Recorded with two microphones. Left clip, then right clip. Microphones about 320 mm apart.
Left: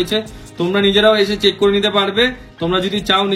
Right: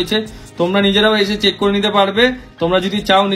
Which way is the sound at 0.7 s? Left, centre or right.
Centre.